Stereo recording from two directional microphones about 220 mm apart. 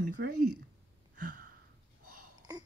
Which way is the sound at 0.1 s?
45° right (ahead or behind).